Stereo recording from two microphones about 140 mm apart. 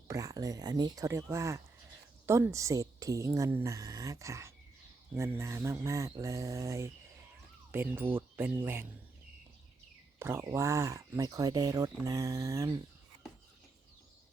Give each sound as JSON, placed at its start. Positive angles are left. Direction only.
{"t": 0.1, "sound": "speech", "side_deg": -25}
{"t": 10.2, "sound": "speech", "side_deg": -20}